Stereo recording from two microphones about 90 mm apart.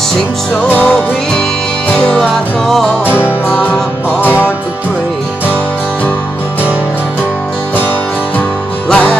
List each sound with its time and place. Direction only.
0.7 s music: 20° left (ahead or behind)
2.1 s music: 5° left (ahead or behind)
3.1 s music: 25° left (ahead or behind)
8.8 s music: 10° left (ahead or behind)